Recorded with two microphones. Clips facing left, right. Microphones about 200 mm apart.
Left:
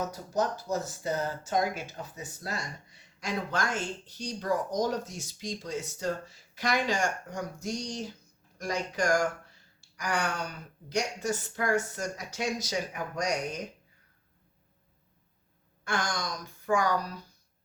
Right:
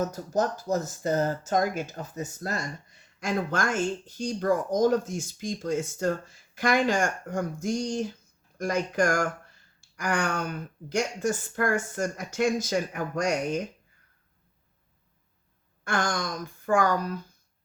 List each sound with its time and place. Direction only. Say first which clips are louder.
0.0 s speech: right 3 dB; 45° right (ahead or behind)
15.8 s speech: right 4 dB; 50° right (ahead or behind)